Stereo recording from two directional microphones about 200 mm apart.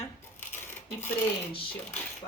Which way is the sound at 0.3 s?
10° left (ahead or behind).